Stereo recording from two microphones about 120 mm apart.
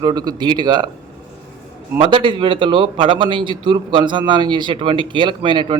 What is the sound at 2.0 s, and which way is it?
A man's voice, 45° right (ahead or behind).